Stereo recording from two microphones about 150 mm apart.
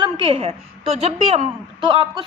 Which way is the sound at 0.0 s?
35° right (ahead or behind).